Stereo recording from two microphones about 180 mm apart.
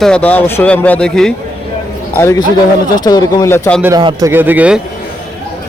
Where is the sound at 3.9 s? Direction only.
20° right (ahead or behind).